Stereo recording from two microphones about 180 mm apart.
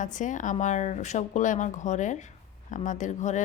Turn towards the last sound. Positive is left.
turn(degrees=45)  # may be behind; listen again after turning